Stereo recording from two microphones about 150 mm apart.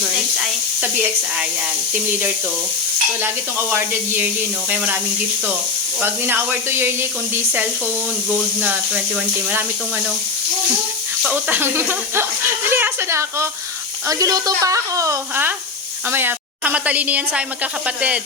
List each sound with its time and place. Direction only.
3.7 s speech: 15° right (ahead or behind)
6.0 s speech: 15° right (ahead or behind)
8.6 s speech: 10° right (ahead or behind)
11.2 s a woman's voice: 10° right (ahead or behind)